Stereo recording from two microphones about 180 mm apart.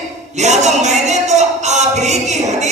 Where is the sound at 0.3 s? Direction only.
40° right (ahead or behind).